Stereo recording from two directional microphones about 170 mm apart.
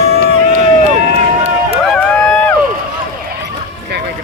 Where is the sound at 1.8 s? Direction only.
5° left (ahead or behind).